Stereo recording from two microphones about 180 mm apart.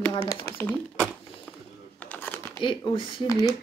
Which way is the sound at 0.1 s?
30° left (ahead or behind).